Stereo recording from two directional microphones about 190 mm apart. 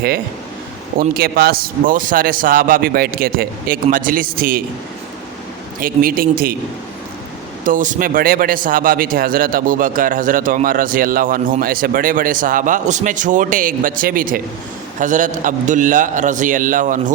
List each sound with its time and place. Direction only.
0.9 s speech: 50° right (ahead or behind)
5.8 s speech: 50° right (ahead or behind)
7.6 s speech: 45° right (ahead or behind)